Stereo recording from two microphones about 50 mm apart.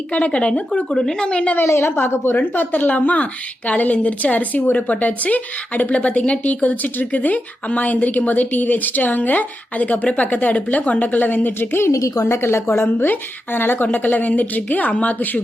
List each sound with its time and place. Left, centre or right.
0.1 s a woman's voice: left
1.6 s a woman's voice: left
2.4 s a woman's voice: left
11.8 s a woman's voice: left
13.8 s a woman's voice: left